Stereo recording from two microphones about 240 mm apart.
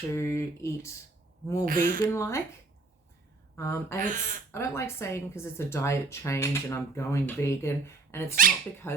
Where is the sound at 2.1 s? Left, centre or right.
Centre.